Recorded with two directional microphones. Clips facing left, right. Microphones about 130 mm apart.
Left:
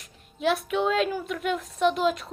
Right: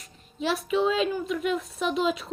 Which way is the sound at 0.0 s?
Centre (ahead or behind).